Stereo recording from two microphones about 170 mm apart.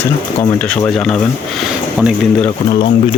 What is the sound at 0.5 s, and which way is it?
Speech, 5° left (ahead or behind).